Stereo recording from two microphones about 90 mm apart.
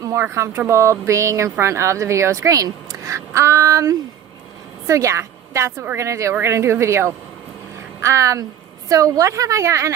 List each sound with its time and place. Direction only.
0.0 s a woman's voice: 35° right (ahead or behind)